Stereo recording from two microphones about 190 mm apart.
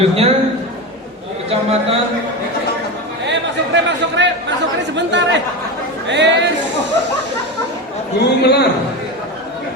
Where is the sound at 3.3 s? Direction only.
70° right (ahead or behind).